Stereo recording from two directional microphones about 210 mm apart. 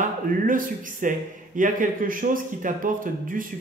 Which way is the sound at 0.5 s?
40° right (ahead or behind).